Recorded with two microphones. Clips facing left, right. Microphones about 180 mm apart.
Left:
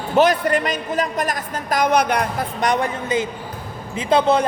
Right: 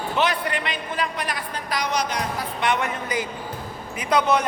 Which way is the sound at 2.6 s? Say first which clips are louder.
Left 4 dB; 35° left (ahead or behind).